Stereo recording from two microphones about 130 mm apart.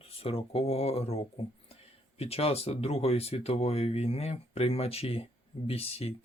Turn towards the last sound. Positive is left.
turn(degrees=50)  # may be behind; listen again after turning